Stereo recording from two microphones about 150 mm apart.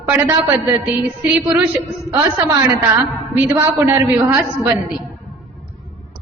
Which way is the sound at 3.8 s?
15° right (ahead or behind).